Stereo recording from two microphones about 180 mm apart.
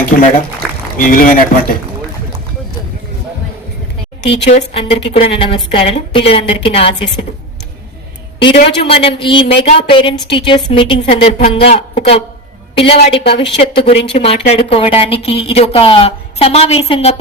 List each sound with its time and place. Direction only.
0.1 s speech: 50° left (ahead or behind)
4.7 s a woman's voice: 30° left (ahead or behind)
8.5 s a woman's voice: 35° left (ahead or behind)